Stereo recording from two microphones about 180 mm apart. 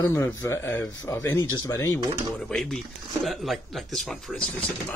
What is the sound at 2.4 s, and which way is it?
Speech, centre (ahead or behind).